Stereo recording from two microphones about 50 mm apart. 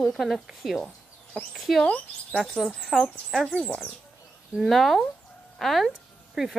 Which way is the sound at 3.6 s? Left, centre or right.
Left.